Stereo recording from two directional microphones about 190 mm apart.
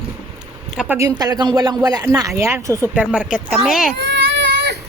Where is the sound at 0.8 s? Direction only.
10° right (ahead or behind).